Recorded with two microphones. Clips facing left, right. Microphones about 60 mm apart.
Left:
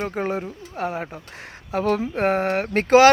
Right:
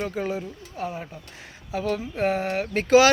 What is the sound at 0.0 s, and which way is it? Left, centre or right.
Speech, left.